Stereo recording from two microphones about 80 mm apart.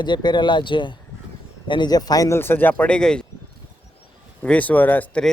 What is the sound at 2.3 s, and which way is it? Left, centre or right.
Speech, left.